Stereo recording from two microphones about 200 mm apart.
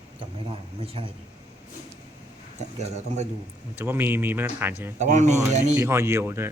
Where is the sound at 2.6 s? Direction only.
35° right (ahead or behind).